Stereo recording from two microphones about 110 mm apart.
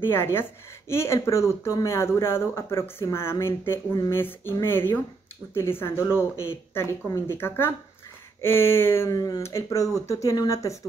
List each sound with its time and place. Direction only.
0.0 s speech: 20° left (ahead or behind)